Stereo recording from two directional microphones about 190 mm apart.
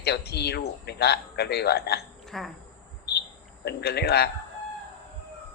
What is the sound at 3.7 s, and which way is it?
Speech, 60° left (ahead or behind).